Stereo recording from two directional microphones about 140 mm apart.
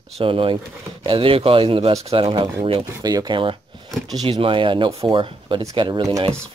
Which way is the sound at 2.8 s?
25° right (ahead or behind).